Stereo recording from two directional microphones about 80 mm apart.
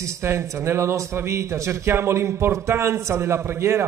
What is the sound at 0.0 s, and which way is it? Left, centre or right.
A man's voice, right.